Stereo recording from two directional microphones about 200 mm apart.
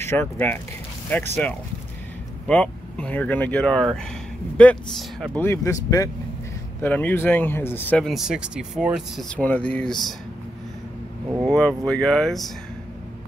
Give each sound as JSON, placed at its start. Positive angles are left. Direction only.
{"t": 0.0, "sound": "speech", "side_deg": 10}
{"t": 11.4, "sound": "speech", "side_deg": 5}